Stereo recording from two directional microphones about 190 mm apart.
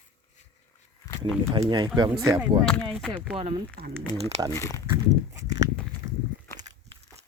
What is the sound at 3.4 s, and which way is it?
Speech, 30° right (ahead or behind).